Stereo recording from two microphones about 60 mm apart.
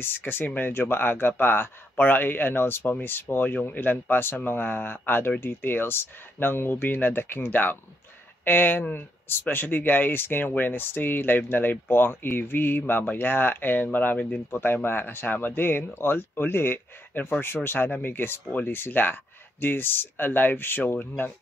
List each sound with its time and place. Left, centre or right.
0.0 s speech: left